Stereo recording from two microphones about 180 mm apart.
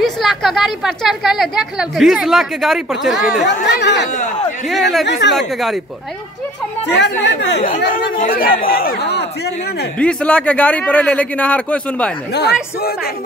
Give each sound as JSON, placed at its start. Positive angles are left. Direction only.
{"t": 0.0, "sound": "speech", "side_deg": 0}
{"t": 3.6, "sound": "speech", "side_deg": 75}
{"t": 5.2, "sound": "speech", "side_deg": 80}
{"t": 7.0, "sound": "speech", "side_deg": 75}
{"t": 7.6, "sound": "speech", "side_deg": 50}
{"t": 9.9, "sound": "a man's voice", "side_deg": 5}
{"t": 12.3, "sound": "speech", "side_deg": 65}